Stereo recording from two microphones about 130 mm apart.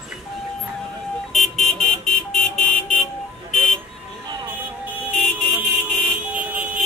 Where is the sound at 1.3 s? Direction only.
Centre (ahead or behind).